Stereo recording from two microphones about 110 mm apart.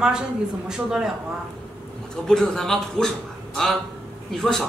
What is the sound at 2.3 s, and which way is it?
Speech, 5° left (ahead or behind).